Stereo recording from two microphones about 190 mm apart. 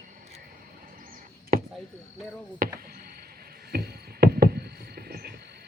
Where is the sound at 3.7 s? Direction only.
55° right (ahead or behind).